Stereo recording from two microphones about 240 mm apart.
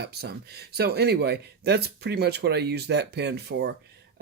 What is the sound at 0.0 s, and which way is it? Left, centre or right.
Speech, right.